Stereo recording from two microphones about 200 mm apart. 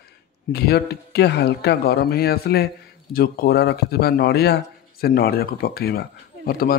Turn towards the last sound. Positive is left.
turn(degrees=50)  # may be behind; listen again after turning